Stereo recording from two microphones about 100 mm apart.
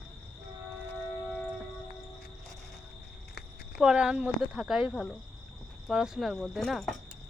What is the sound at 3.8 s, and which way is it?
Speech, 10° right (ahead or behind).